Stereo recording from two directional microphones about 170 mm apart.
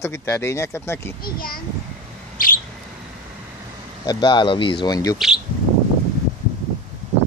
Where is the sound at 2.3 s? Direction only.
55° left (ahead or behind).